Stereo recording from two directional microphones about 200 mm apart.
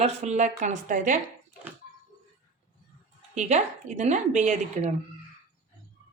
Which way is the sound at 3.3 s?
35° right (ahead or behind).